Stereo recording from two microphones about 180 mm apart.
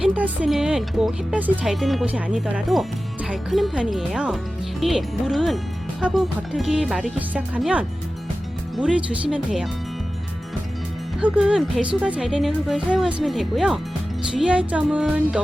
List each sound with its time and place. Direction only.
0.0 s speech: 10° right (ahead or behind)
11.2 s speech: 5° right (ahead or behind)